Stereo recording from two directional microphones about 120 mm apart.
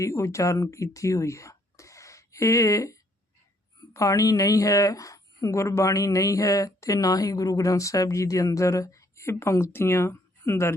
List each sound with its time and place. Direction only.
0.0 s speech: 25° left (ahead or behind)